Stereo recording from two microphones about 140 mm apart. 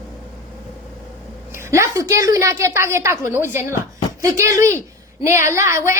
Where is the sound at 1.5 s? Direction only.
20° right (ahead or behind).